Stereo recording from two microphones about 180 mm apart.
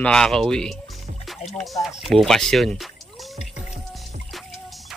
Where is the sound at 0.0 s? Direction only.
5° left (ahead or behind).